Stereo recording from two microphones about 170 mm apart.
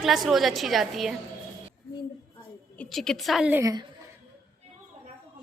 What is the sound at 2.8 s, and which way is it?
Speech, 5° left (ahead or behind).